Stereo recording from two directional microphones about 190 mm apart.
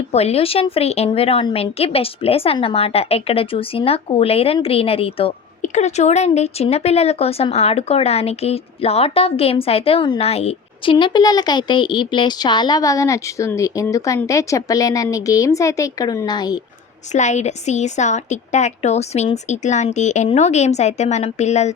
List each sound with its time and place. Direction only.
0.1 s a woman's voice: 35° left (ahead or behind)
17.1 s a woman's voice: 40° left (ahead or behind)